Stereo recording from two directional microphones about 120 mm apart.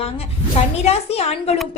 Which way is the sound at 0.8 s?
60° left (ahead or behind).